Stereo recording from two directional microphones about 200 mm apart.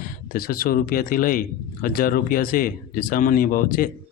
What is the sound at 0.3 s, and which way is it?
Speech, 45° left (ahead or behind).